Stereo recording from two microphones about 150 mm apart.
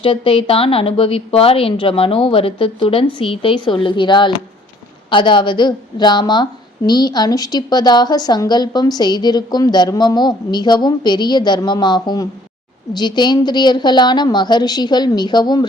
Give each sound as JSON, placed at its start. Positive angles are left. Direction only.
{"t": 0.0, "sound": "a woman's voice", "side_deg": 35}